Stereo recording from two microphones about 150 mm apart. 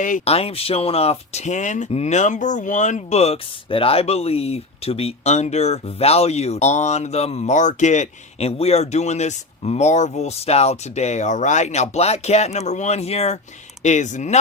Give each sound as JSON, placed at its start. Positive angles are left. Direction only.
{"t": 0.3, "sound": "speech", "side_deg": 40}